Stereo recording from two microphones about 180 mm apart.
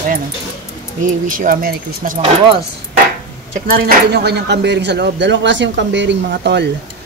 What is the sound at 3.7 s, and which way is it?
Speech, 55° right (ahead or behind).